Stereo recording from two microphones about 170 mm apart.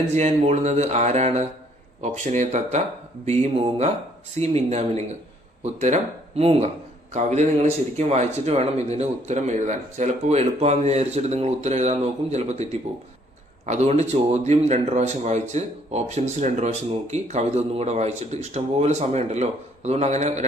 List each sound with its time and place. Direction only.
0.1 s speech: 40° right (ahead or behind)